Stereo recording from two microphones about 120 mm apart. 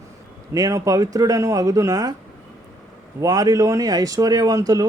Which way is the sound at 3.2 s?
30° right (ahead or behind).